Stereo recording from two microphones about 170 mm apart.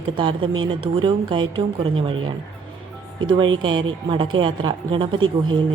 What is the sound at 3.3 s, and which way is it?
Speech, 25° right (ahead or behind).